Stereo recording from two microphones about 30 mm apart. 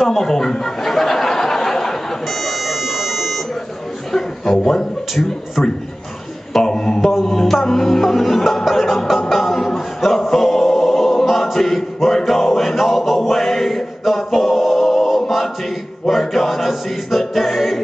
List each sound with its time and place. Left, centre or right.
0.0 s a sound: centre
2.4 s music: centre
4.1 s a man's voice: centre
6.5 s a sound: left
7.0 s music: centre
9.3 s speech: centre
10.3 s music: centre
11.5 s a sound: centre
12.4 s music: centre
15.0 s a capella: centre
16.1 s music: centre
17.3 s a capella: centre